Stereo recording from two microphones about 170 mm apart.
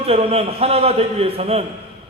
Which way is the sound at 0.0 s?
35° right (ahead or behind).